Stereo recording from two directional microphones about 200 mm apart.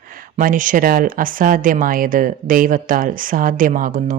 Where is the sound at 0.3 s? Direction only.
40° right (ahead or behind).